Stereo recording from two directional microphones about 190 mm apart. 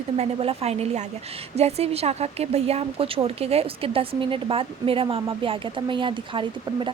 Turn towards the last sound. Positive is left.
turn(degrees=-25)  # may be behind; listen again after turning